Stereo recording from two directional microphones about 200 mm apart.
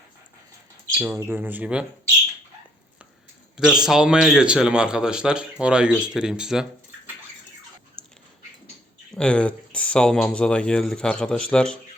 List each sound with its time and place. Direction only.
0.9 s speech: 10° right (ahead or behind)
3.6 s a man's voice: 5° right (ahead or behind)
9.1 s a man's voice: 5° left (ahead or behind)